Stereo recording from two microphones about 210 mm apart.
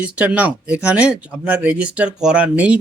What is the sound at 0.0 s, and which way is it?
Speech, 5° right (ahead or behind).